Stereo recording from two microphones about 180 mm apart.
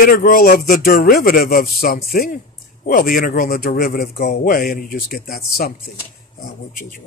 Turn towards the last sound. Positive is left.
turn(degrees=55)  # may be behind; listen again after turning